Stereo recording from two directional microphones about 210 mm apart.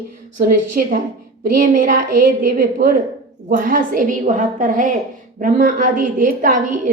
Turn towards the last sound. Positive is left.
turn(degrees=-35)  # may be behind; listen again after turning